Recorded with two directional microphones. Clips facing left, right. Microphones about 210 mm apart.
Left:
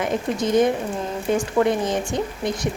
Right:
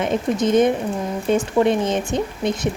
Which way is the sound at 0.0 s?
20° right (ahead or behind).